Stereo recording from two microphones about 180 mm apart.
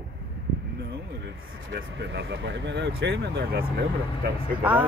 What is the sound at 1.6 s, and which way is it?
Speech, 75° right (ahead or behind).